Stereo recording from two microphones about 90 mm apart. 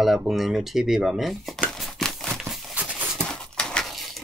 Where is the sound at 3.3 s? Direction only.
10° left (ahead or behind).